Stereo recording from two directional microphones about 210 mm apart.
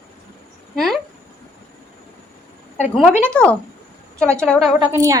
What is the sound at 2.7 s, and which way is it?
Speech, 30° left (ahead or behind).